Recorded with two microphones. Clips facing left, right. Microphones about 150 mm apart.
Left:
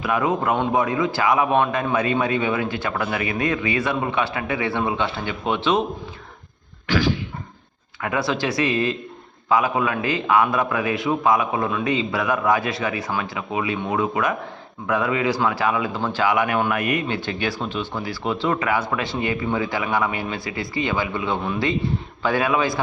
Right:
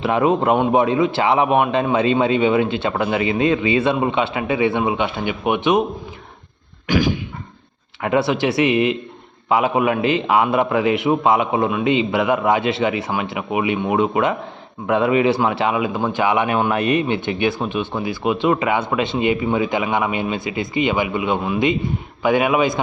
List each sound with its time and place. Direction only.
0.0 s a man's voice: 30° right (ahead or behind)
6.8 s a sound: 15° right (ahead or behind)
8.0 s a man's voice: 25° right (ahead or behind)